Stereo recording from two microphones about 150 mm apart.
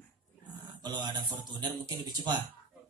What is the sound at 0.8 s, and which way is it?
Speech, 30° right (ahead or behind).